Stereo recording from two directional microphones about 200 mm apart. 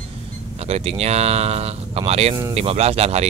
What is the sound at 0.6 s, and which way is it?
Speech, 30° right (ahead or behind).